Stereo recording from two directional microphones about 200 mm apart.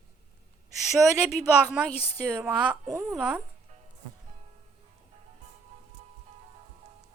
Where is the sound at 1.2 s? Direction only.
5° right (ahead or behind).